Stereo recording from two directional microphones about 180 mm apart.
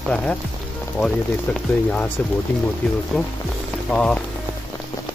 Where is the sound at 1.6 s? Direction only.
5° left (ahead or behind).